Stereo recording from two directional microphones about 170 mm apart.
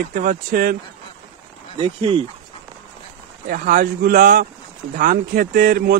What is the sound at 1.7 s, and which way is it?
Speech, 30° right (ahead or behind).